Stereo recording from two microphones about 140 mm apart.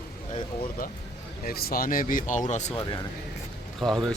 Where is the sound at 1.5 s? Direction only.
90° left; by 2.4 s 70° left (ahead or behind).